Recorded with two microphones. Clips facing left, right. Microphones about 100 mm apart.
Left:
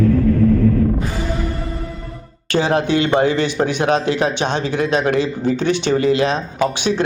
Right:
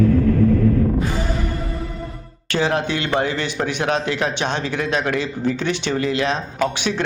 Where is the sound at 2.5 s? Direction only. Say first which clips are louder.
Left 4 dB; 35° left (ahead or behind).